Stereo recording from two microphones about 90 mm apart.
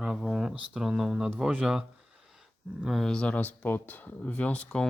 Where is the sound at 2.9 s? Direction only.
5° left (ahead or behind).